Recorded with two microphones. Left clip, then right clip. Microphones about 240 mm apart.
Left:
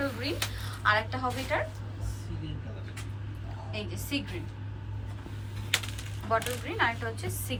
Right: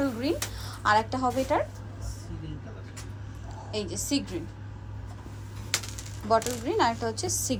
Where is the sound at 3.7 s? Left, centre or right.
Centre.